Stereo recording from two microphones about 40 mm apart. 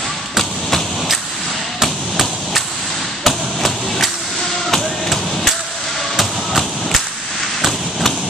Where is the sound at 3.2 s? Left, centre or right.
Centre.